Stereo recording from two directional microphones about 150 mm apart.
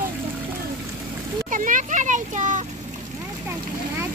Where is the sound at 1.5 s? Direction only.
60° right (ahead or behind).